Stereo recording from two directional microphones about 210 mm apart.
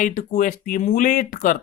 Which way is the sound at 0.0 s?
40° left (ahead or behind).